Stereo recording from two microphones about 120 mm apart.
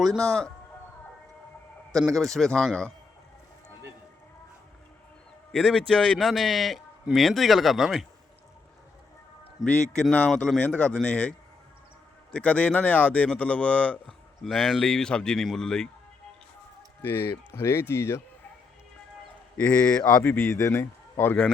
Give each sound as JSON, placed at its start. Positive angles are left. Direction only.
{"t": 0.0, "sound": "speech", "side_deg": 5}
{"t": 2.1, "sound": "speech", "side_deg": 5}
{"t": 5.5, "sound": "a man's voice", "side_deg": 5}
{"t": 9.9, "sound": "speech", "side_deg": 10}
{"t": 17.0, "sound": "speech", "side_deg": 20}
{"t": 19.5, "sound": "speech", "side_deg": 10}